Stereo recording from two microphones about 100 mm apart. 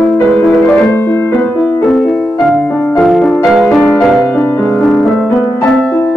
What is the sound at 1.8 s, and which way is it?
Music, centre (ahead or behind).